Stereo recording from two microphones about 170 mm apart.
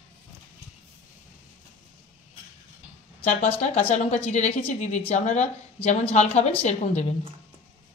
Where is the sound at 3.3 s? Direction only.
40° left (ahead or behind).